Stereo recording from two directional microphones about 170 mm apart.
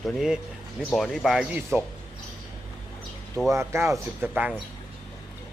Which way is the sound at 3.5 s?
15° right (ahead or behind).